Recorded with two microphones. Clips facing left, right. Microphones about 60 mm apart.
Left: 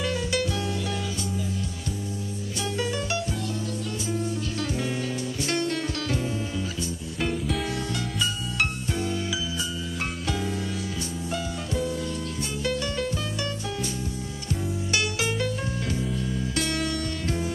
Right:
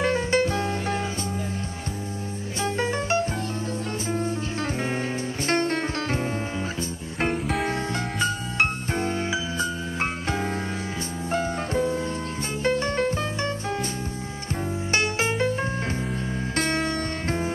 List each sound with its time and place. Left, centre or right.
0.0 s music: right
2.6 s music: right
7.2 s music: right
7.6 s music: right
14.9 s music: right